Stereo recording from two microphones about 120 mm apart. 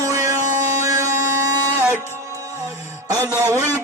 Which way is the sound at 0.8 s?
30° right (ahead or behind).